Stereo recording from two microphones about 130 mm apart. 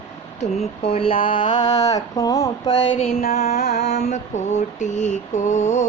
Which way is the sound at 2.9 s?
50° left (ahead or behind).